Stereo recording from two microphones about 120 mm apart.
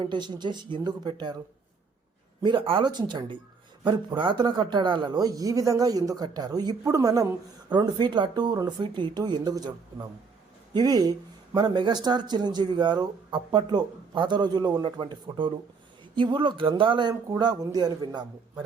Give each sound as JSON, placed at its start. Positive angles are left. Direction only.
{"t": 0.0, "sound": "speech", "side_deg": -40}
{"t": 2.4, "sound": "speech", "side_deg": -45}